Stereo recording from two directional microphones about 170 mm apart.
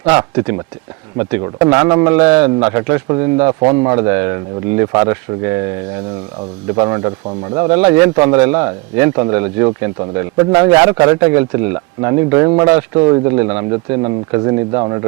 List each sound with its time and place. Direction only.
0.0 s a man's voice: 15° right (ahead or behind)
6.7 s a man's voice: 20° right (ahead or behind)